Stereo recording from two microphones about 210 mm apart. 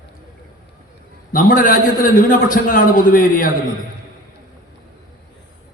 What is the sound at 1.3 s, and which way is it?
A man's voice, 40° left (ahead or behind).